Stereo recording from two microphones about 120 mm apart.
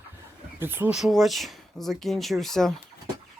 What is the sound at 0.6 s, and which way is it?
Speech, 20° right (ahead or behind).